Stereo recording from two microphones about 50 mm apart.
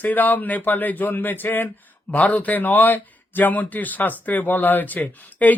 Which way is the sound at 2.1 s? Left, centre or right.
Left.